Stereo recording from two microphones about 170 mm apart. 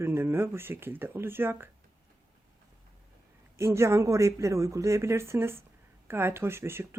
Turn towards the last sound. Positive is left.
turn(degrees=-15)  # may be behind; listen again after turning